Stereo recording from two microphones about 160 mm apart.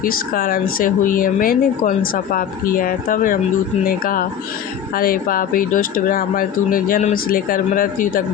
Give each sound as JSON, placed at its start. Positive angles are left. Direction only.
{"t": 0.0, "sound": "speech", "side_deg": 65}